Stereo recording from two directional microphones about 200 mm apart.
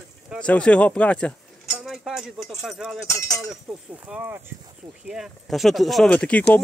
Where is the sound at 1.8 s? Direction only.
5° right (ahead or behind).